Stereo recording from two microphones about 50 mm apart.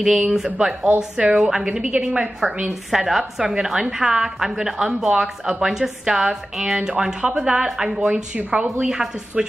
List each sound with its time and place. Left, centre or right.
0.0 s a woman's voice: centre
2.6 s a woman's voice: centre
8.4 s a woman's voice: right
8.6 s a woman's voice: centre